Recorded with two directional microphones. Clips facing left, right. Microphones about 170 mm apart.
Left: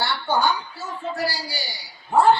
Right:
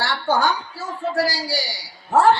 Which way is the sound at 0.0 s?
90° right.